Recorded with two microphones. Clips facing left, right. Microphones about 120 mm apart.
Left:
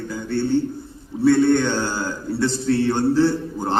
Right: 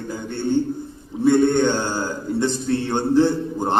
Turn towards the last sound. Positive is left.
turn(degrees=-20)  # may be behind; listen again after turning